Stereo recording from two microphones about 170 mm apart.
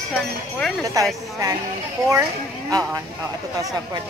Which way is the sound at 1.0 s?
20° right (ahead or behind).